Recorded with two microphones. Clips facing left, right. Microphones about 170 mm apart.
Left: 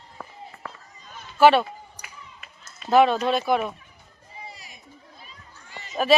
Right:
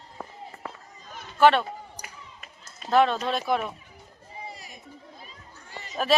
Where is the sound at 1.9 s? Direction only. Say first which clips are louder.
Right 1 dB; 40° right (ahead or behind).